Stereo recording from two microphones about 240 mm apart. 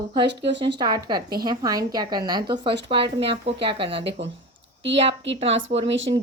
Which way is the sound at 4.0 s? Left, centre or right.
Right.